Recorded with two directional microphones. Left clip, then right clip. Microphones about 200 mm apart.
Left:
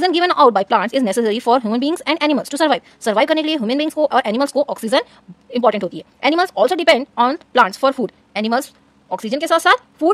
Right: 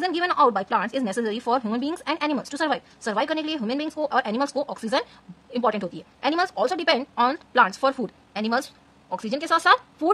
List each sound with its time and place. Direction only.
0.0 s speech: 35° left (ahead or behind)